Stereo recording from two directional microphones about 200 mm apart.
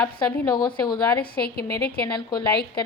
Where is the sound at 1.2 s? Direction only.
50° left (ahead or behind).